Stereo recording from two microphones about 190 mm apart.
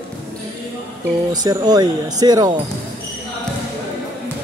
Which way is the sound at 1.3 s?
20° right (ahead or behind).